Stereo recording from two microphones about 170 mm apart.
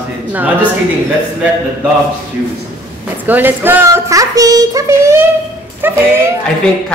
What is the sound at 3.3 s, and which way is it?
A woman's voice, 10° right (ahead or behind).